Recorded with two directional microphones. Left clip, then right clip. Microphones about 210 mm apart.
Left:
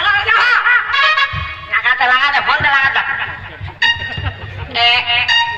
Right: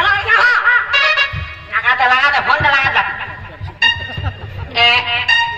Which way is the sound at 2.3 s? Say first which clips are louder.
Even; 20° right (ahead or behind).